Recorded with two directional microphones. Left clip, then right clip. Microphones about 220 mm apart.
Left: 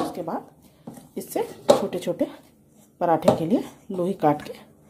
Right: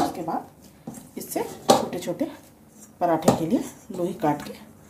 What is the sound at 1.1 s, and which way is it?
Speech, 40° left (ahead or behind).